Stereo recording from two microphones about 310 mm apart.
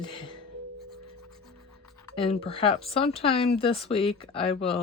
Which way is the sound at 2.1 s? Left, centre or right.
Centre.